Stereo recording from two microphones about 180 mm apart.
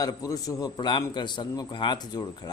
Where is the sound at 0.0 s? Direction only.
20° left (ahead or behind).